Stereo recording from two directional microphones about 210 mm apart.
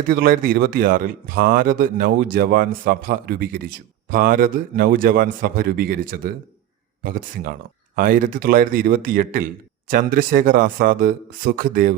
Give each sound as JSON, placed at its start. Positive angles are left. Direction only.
{"t": 0.1, "sound": "speech", "side_deg": -45}